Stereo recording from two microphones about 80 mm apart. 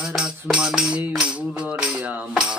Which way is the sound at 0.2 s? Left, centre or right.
Centre.